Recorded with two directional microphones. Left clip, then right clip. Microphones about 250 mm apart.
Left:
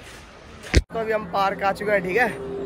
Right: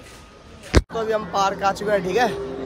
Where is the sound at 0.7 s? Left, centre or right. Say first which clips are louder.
Right 2 dB; centre.